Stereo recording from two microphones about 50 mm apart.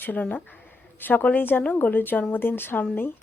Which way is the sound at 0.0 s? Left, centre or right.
Left.